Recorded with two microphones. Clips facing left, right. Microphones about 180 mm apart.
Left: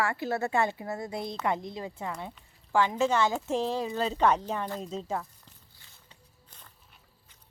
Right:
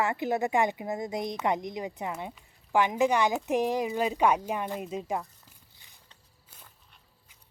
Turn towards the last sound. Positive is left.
turn(degrees=-15)  # may be behind; listen again after turning